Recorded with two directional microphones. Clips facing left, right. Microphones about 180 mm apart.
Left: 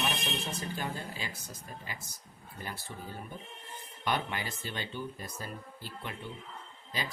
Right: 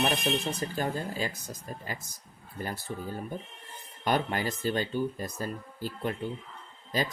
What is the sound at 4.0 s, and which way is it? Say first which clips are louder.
Speech: right 6 dB; 45° right (ahead or behind).